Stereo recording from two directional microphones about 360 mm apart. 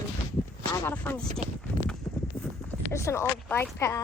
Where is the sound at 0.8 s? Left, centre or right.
Centre.